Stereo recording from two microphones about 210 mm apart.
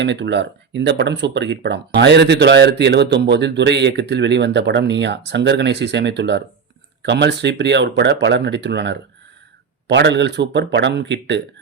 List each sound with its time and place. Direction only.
0.0 s speech: 55° right (ahead or behind)